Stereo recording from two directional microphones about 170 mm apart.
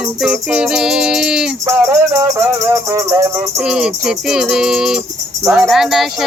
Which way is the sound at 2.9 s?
15° right (ahead or behind).